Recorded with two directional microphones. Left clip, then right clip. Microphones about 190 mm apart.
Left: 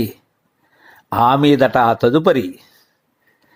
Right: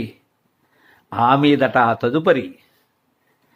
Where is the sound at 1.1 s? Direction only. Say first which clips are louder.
Left 2 dB; 25° left (ahead or behind).